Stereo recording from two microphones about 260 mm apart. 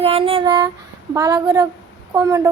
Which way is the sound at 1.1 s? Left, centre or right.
Centre.